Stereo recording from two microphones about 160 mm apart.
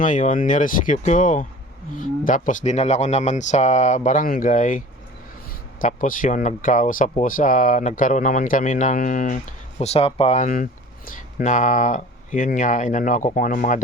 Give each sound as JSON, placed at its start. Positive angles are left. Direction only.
{"t": 0.0, "sound": "speech", "side_deg": 55}
{"t": 5.8, "sound": "speech", "side_deg": 55}